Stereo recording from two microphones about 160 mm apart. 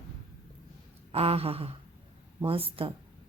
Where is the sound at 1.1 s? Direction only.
35° right (ahead or behind).